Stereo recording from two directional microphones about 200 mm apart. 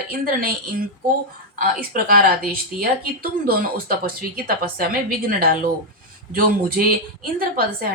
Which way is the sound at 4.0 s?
50° right (ahead or behind).